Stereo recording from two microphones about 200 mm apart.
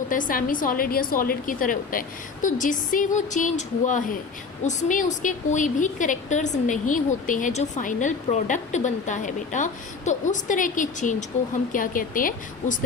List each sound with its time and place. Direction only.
0.1 s a woman's voice: 40° left (ahead or behind)